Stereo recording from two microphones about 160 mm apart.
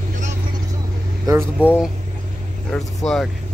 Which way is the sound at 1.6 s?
10° right (ahead or behind).